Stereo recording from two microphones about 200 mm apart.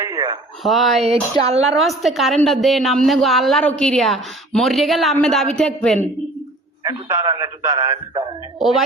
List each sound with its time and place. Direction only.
0.0 s a sound: 20° right (ahead or behind)
0.6 s a woman's voice: centre (ahead or behind)
1.0 s speech: 30° right (ahead or behind)
1.7 s a woman's voice: centre (ahead or behind)
6.8 s a man's voice: 15° right (ahead or behind)
8.5 s a woman's voice: centre (ahead or behind)